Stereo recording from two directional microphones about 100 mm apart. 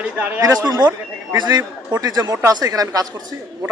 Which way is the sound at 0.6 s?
40° right (ahead or behind).